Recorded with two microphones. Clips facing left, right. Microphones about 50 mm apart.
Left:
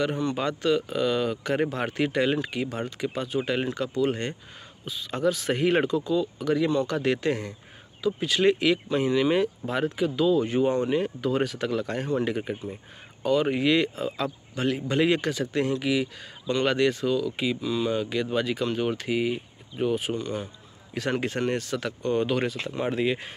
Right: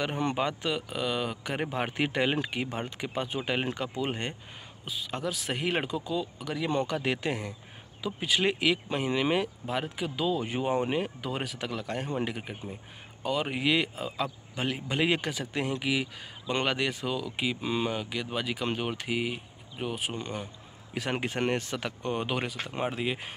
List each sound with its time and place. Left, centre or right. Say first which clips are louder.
0.4 s speech: left 5 dB; centre
17.6 s speech: left 3 dB; right
17.8 s speech: left 6 dB; centre